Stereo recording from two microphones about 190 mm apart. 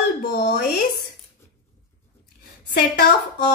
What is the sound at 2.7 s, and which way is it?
Speech, 55° left (ahead or behind).